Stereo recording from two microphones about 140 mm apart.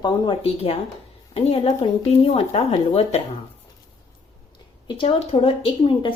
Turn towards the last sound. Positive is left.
turn(degrees=35)  # may be behind; listen again after turning